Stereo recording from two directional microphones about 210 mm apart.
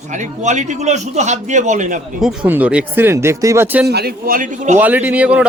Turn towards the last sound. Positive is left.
turn(degrees=-5)  # may be behind; listen again after turning